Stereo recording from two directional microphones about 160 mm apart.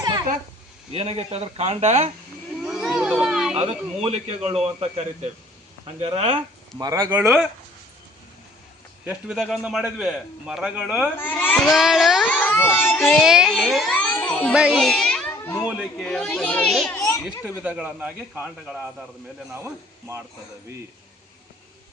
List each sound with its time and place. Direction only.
0.9 s a man's voice: 40° right (ahead or behind)
2.6 s children playing: centre (ahead or behind)
3.5 s a man's voice: 40° right (ahead or behind)
6.7 s a man's voice: 20° right (ahead or behind); by 7.4 s 5° right (ahead or behind)
9.0 s a man's voice: 5° right (ahead or behind)
11.2 s a child's voice: 10° left (ahead or behind)
11.7 s a man's voice: centre (ahead or behind)
12.2 s speech: 10° left (ahead or behind)
13.1 s a man's voice: 5° right (ahead or behind)
13.9 s a sound: 10° left (ahead or behind)
14.5 s a child's voice: 5° right (ahead or behind)
16.9 s children playing: 20° left (ahead or behind)
17.6 s a man's voice: 10° right (ahead or behind)
19.5 s a man's voice: 15° right (ahead or behind)